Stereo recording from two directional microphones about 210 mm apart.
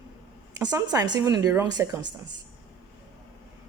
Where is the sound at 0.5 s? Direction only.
15° right (ahead or behind).